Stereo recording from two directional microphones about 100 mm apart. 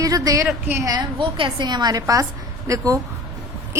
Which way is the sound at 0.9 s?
50° right (ahead or behind).